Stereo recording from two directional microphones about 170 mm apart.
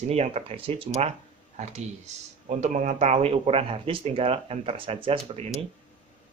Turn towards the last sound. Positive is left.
turn(degrees=-35)  # may be behind; listen again after turning